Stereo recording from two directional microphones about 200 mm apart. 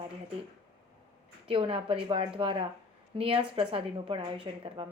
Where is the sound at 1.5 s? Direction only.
25° right (ahead or behind).